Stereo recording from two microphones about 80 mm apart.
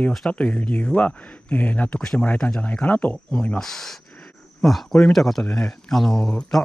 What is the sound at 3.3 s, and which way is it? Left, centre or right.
Speech, centre.